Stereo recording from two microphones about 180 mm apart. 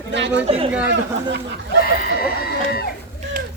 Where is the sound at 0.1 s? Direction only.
80° right.